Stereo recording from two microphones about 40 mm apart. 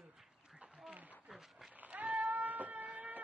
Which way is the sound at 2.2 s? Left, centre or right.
Right.